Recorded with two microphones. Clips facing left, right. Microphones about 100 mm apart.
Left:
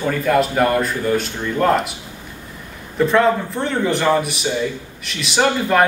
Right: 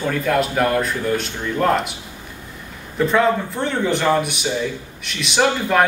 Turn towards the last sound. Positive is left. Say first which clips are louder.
# left 1 dB
turn(degrees=0)  # may be behind; listen again after turning